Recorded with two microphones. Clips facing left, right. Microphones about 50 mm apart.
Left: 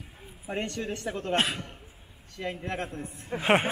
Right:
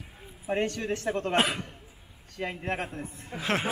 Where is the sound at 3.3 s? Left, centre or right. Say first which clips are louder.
Left 6 dB; left.